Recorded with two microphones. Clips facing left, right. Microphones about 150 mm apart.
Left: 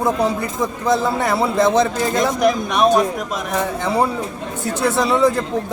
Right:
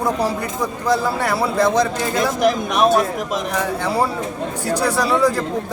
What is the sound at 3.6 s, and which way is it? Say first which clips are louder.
A man's voice: left 2 dB; 20° left (ahead or behind).